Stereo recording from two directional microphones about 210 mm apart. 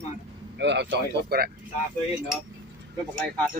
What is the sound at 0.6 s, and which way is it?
Speech, 55° right (ahead or behind).